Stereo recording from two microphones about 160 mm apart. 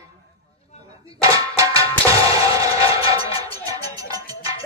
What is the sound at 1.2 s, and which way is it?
Music, 20° right (ahead or behind).